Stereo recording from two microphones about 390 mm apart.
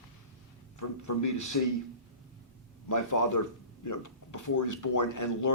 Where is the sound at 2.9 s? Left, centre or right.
Left.